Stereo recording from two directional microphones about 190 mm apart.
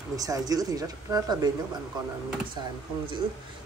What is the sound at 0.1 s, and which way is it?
Speech, 20° right (ahead or behind).